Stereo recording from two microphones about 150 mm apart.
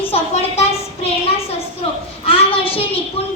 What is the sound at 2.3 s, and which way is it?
A woman's voice, 40° left (ahead or behind).